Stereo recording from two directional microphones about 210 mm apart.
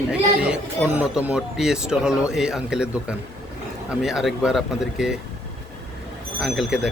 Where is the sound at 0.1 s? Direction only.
5° right (ahead or behind).